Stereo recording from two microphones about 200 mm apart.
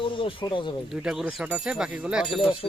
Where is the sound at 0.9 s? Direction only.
5° right (ahead or behind).